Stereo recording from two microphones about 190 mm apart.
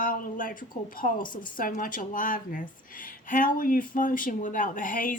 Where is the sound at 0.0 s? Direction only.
45° left (ahead or behind).